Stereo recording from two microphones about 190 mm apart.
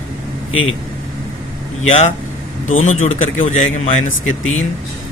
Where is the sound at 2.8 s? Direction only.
35° left (ahead or behind).